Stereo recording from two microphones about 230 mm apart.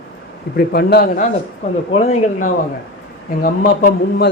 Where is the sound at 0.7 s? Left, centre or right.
Left.